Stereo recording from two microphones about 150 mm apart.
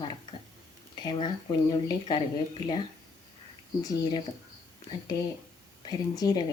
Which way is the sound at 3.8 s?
25° left (ahead or behind).